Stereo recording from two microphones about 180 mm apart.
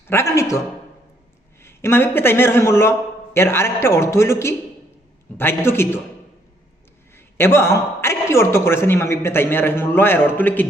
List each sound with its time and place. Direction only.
0.1 s a man's voice: 15° left (ahead or behind)
1.6 s a man's voice: 15° left (ahead or behind)
7.3 s a man's voice: 15° left (ahead or behind)